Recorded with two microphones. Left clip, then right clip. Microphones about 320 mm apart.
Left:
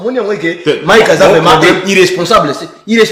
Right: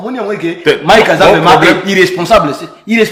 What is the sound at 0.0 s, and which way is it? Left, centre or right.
Speech, centre.